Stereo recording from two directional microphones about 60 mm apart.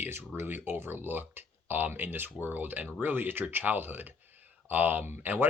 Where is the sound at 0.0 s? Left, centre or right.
Right.